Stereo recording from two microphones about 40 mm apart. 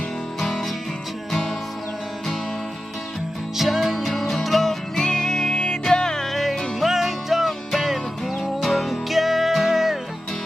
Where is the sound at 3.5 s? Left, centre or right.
Centre.